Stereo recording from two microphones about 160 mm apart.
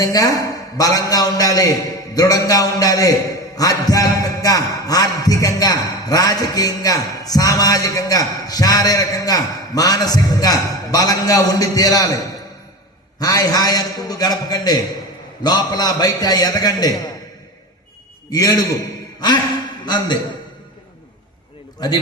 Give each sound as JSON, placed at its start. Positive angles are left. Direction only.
{"t": 0.0, "sound": "a man's voice", "side_deg": 25}
{"t": 18.3, "sound": "a man's voice", "side_deg": 25}